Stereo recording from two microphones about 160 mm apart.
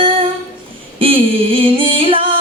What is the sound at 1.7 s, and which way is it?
Music, 30° right (ahead or behind).